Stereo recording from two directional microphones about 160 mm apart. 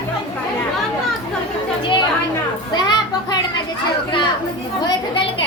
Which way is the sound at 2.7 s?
25° left (ahead or behind).